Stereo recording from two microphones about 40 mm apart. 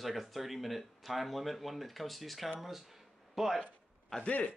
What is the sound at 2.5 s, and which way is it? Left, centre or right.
Speech, centre.